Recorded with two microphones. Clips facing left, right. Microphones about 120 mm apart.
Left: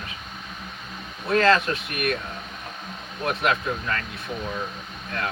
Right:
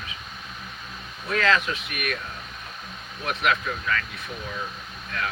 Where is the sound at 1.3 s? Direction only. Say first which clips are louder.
Left 4 dB; 35° left (ahead or behind).